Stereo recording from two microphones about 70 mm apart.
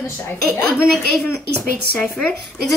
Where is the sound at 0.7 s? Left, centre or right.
Centre.